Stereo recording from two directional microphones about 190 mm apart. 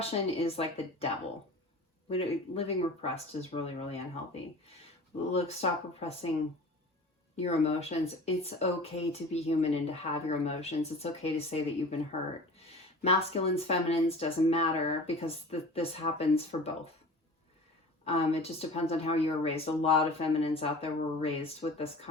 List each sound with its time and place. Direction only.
0.0 s speech: 30° left (ahead or behind)
5.3 s speech: 35° left (ahead or behind)
7.4 s speech: 35° left (ahead or behind)
13.0 s speech: 30° left (ahead or behind)
18.0 s speech: 30° left (ahead or behind)